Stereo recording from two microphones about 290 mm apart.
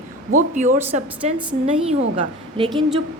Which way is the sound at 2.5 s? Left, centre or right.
Centre.